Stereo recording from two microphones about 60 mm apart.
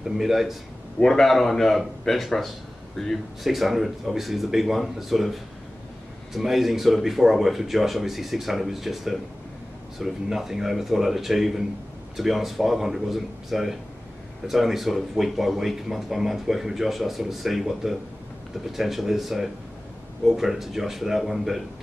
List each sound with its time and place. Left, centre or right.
0.0 s speech: centre
0.9 s speech: centre